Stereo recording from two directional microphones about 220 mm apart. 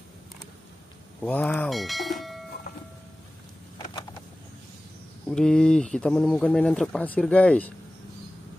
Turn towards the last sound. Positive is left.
turn(degrees=5)  # may be behind; listen again after turning